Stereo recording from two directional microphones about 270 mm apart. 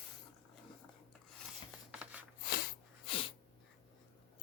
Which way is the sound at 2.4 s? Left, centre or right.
Left.